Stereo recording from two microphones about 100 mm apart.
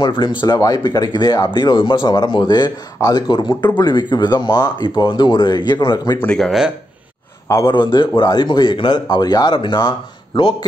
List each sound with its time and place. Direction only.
0.0 s speech: 55° left (ahead or behind)
0.6 s speech: 40° left (ahead or behind)
6.1 s speech: 10° left (ahead or behind)
7.4 s a man's voice: 30° left (ahead or behind)
7.7 s speech: 50° left (ahead or behind)